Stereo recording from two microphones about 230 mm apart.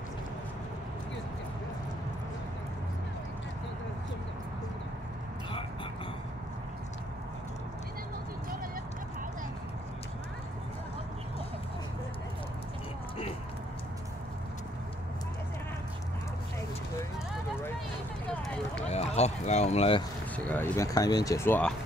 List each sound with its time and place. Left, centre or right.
18.3 s run: centre
18.9 s run: left
20.3 s speech: centre